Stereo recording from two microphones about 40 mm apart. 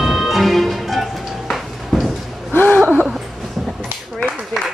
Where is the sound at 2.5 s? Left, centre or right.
Left.